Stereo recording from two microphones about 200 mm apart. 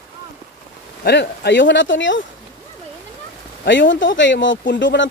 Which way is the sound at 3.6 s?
65° left (ahead or behind).